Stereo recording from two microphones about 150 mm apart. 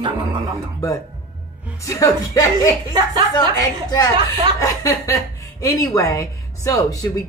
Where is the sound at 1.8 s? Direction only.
20° left (ahead or behind).